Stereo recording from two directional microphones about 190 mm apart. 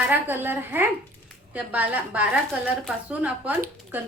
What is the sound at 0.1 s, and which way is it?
Speech, 10° right (ahead or behind).